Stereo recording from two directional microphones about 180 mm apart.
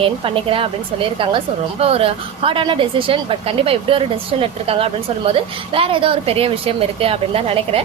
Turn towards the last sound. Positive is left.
turn(degrees=-35)  # may be behind; listen again after turning